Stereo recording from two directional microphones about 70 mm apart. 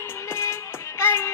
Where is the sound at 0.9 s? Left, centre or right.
Left.